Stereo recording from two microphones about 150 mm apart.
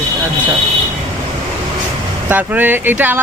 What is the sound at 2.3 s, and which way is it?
Speech, 10° right (ahead or behind).